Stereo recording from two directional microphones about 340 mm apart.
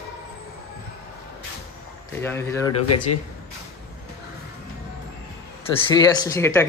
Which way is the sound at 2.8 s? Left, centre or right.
Left.